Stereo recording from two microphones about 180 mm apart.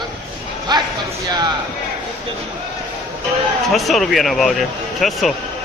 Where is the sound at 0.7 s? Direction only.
25° right (ahead or behind).